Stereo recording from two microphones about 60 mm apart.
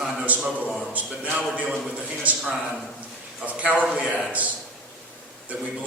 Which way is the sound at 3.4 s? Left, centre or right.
Right.